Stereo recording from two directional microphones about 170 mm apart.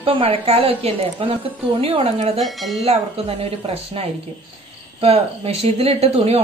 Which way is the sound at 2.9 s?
35° right (ahead or behind).